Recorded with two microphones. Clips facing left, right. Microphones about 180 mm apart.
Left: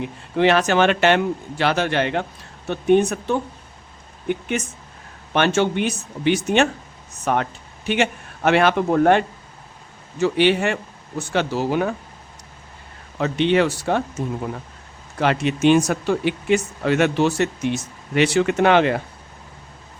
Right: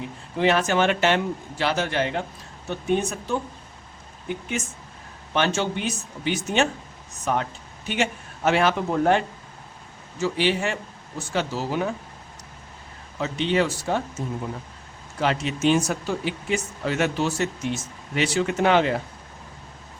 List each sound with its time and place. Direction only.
0.0 s speech: 70° left (ahead or behind)
13.1 s speech: 65° left (ahead or behind)